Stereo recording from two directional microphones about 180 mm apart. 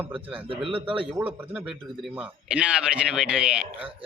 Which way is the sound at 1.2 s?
5° right (ahead or behind).